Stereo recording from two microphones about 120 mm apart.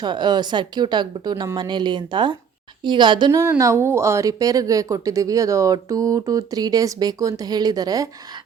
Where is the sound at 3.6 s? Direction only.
25° right (ahead or behind).